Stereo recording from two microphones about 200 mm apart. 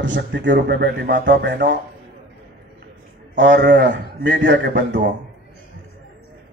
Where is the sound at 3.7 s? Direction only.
60° right (ahead or behind).